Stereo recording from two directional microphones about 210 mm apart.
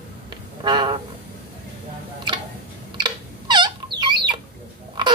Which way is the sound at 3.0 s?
20° right (ahead or behind).